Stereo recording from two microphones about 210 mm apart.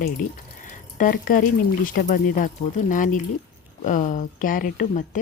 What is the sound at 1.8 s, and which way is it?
Speech, 40° left (ahead or behind).